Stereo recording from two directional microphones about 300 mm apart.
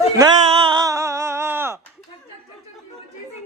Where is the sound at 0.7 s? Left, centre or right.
Centre.